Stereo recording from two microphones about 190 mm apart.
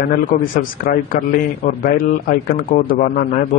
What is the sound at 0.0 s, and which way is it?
A man's voice, 45° left (ahead or behind).